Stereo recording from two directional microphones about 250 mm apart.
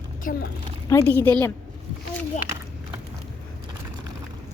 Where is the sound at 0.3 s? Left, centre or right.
Left.